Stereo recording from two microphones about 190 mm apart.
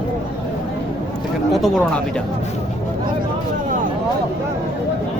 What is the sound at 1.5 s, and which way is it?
Speech, centre (ahead or behind).